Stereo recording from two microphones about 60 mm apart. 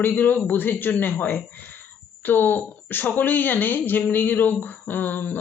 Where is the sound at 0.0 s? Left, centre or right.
Left.